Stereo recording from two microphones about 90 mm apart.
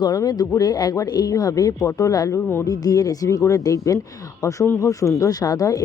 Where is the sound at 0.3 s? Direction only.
45° left (ahead or behind).